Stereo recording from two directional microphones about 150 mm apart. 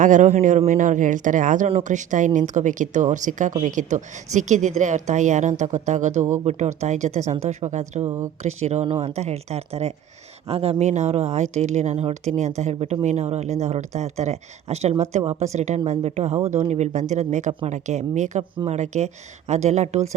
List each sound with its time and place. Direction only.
0.0 s speech: 55° right (ahead or behind)
8.0 s a woman's voice: 20° right (ahead or behind)
8.4 s speech: 45° right (ahead or behind)